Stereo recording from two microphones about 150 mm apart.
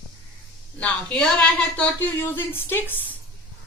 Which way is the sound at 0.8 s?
5° left (ahead or behind).